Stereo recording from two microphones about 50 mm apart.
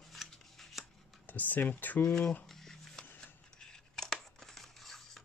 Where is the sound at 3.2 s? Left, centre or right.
Centre.